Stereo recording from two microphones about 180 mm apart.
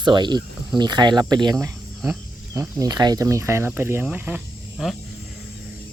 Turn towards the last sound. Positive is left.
turn(degrees=0)  # may be behind; listen again after turning